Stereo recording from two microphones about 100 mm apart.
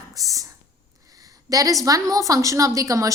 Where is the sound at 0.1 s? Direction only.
35° right (ahead or behind).